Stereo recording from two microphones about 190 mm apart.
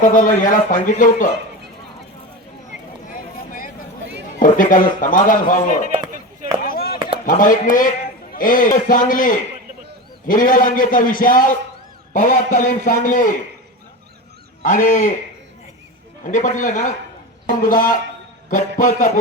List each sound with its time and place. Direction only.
0.0 s a man's voice: 45° left (ahead or behind)
4.4 s a man's voice: 45° left (ahead or behind)
6.6 s chop: 50° left (ahead or behind)
7.3 s a man's voice: 45° left (ahead or behind)
14.6 s a man's voice: 45° left (ahead or behind)
16.2 s a man's voice: 40° left (ahead or behind)